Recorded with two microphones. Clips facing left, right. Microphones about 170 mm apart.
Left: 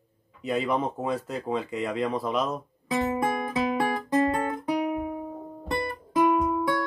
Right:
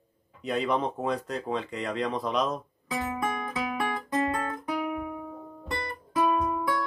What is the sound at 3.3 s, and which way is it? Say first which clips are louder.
Music: left 5 dB; 30° left (ahead or behind).